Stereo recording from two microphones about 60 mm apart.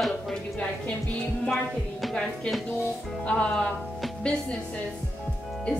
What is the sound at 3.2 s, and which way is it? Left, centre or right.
Music, centre.